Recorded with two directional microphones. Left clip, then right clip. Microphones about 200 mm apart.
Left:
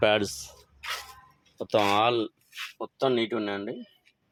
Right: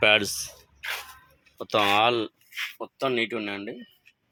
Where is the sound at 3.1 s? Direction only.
30° right (ahead or behind).